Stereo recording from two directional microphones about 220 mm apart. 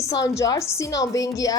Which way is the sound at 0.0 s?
15° left (ahead or behind).